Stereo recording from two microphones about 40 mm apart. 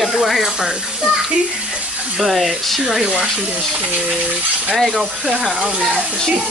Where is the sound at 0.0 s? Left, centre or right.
Centre.